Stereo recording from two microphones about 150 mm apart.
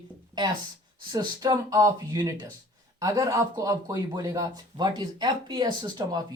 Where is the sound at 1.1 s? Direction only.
25° right (ahead or behind).